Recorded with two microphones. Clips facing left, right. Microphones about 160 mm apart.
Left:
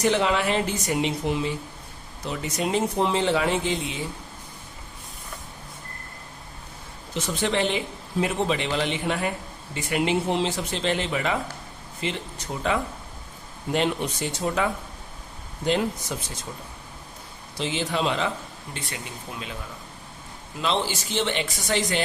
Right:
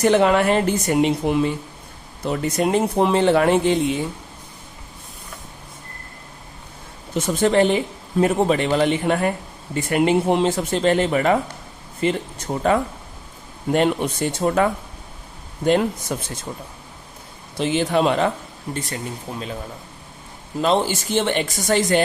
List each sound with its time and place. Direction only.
0.0 s speech: 55° right (ahead or behind)
7.1 s speech: 50° right (ahead or behind)
17.6 s speech: 55° right (ahead or behind)
18.7 s speech: 40° right (ahead or behind)
20.6 s speech: 45° right (ahead or behind)